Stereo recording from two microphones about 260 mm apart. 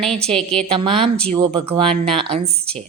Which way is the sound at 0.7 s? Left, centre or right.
Centre.